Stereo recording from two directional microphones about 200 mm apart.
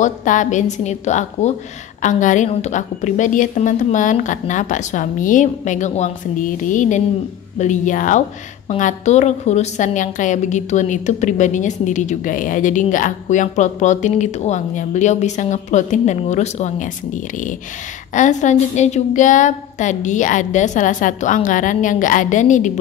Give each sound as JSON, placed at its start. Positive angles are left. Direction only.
{"t": 0.0, "sound": "a woman's voice", "side_deg": 40}